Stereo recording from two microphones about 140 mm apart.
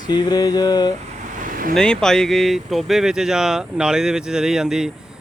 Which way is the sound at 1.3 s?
75° right (ahead or behind).